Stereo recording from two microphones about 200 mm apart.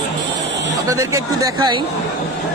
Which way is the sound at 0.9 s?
15° right (ahead or behind).